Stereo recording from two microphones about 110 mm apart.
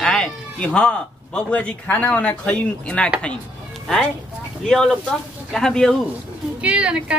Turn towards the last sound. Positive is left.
turn(degrees=-10)  # may be behind; listen again after turning